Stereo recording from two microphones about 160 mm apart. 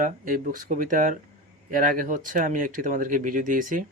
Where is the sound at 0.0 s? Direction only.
60° right (ahead or behind).